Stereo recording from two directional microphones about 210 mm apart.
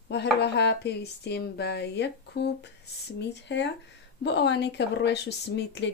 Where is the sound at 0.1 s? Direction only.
55° left (ahead or behind).